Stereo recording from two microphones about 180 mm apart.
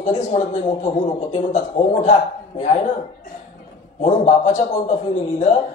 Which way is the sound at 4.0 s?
40° left (ahead or behind).